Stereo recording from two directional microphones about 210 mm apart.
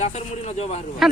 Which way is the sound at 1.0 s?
Centre (ahead or behind).